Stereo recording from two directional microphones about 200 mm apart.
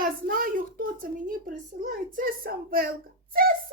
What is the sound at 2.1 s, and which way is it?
Speech, 45° right (ahead or behind).